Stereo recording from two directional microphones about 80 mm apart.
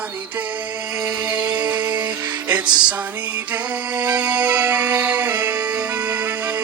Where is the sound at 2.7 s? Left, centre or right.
Right.